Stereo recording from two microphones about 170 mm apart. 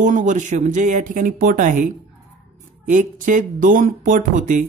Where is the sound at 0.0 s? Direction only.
45° right (ahead or behind).